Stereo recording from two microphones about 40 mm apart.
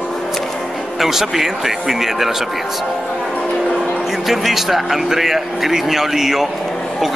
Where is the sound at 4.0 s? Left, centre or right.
Centre.